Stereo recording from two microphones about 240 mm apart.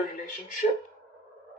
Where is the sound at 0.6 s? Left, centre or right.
Left.